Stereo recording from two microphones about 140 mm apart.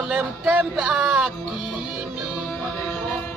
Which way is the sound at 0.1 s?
5° right (ahead or behind).